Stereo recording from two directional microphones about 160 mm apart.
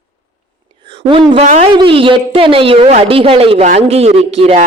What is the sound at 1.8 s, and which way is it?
Speech, 30° right (ahead or behind).